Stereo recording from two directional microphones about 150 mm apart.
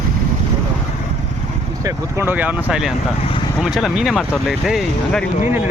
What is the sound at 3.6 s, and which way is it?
Speech, centre (ahead or behind).